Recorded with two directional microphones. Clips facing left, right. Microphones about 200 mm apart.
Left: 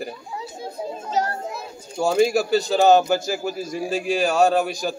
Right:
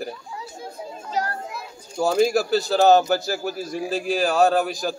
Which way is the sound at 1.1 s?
25° left (ahead or behind).